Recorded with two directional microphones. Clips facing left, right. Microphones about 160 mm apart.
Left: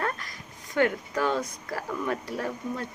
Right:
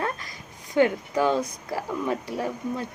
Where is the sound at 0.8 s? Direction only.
20° right (ahead or behind).